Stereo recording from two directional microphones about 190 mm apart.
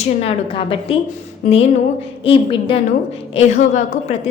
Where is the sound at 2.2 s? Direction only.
30° left (ahead or behind).